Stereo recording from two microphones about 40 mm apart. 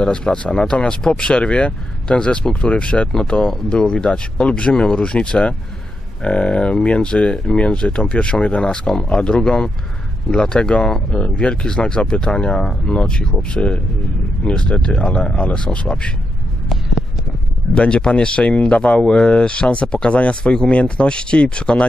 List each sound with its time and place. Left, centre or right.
0.0 s speech: left
17.7 s speech: left